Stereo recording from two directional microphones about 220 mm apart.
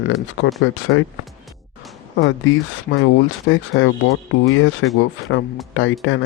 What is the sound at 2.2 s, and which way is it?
Speech, 60° left (ahead or behind).